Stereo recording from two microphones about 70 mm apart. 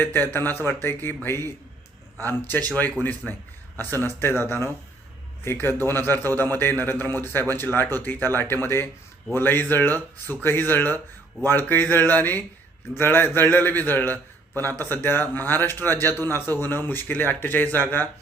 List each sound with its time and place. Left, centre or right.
0.0 s a man's voice: left